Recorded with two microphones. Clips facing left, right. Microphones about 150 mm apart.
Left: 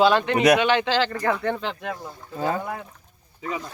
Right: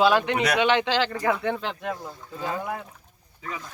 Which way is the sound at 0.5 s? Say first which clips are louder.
Left 1 dB; 20° right (ahead or behind).